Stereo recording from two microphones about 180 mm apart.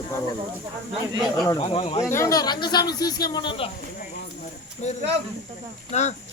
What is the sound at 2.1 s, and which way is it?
Speech, 15° left (ahead or behind).